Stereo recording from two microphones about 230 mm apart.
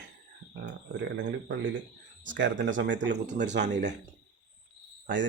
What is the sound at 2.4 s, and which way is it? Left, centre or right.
Speech, right.